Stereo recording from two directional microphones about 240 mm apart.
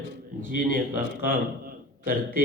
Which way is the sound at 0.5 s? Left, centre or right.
Right.